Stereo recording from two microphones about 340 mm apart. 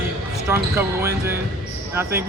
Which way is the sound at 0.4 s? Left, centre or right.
Centre.